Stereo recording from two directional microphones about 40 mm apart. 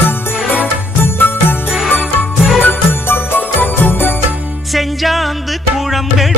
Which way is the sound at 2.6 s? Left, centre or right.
Left.